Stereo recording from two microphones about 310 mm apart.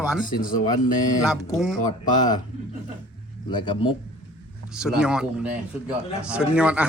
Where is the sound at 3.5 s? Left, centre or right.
Centre.